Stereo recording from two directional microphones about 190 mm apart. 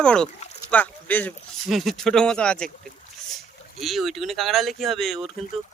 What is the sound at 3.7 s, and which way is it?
Speech, centre (ahead or behind).